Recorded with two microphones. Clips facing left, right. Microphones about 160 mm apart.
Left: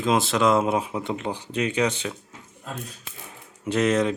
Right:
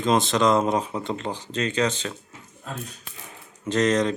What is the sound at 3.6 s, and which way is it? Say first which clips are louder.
Speech: even; 10° left (ahead or behind).